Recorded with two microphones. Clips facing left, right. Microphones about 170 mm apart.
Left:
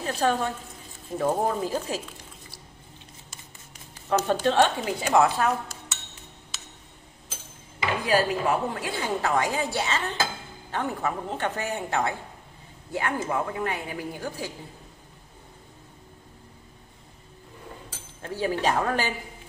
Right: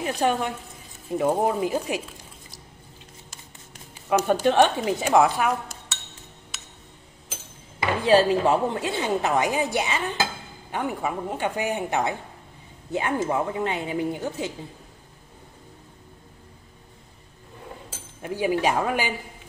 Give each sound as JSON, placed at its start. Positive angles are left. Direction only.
{"t": 0.0, "sound": "a woman's voice", "side_deg": -15}
{"t": 3.9, "sound": "speech", "side_deg": -10}
{"t": 8.0, "sound": "a woman's voice", "side_deg": -25}
{"t": 18.2, "sound": "speech", "side_deg": -15}